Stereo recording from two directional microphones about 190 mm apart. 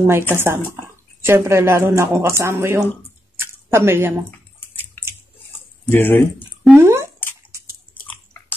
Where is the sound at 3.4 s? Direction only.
10° right (ahead or behind).